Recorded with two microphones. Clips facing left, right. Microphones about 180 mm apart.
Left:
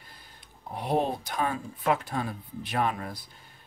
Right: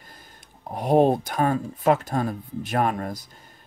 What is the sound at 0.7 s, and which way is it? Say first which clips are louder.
Speech: right 9 dB; 45° right (ahead or behind).